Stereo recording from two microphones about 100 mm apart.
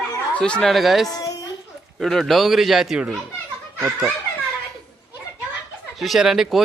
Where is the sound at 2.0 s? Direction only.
Centre (ahead or behind).